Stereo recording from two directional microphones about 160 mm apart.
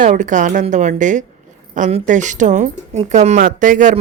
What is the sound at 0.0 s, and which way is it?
Speech, 50° right (ahead or behind).